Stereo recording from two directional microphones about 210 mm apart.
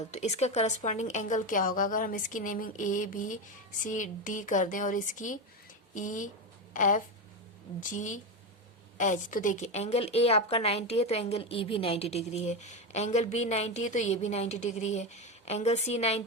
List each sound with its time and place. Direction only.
0.1 s a woman's voice: 30° left (ahead or behind)